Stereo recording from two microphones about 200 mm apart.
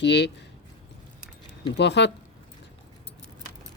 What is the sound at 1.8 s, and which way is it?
Speech, 60° left (ahead or behind).